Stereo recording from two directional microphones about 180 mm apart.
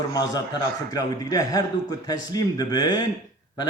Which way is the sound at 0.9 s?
20° left (ahead or behind).